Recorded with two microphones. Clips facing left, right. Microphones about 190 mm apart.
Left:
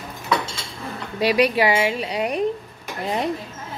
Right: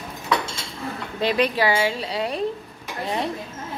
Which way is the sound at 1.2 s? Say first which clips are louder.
Left 3 dB; 10° left (ahead or behind).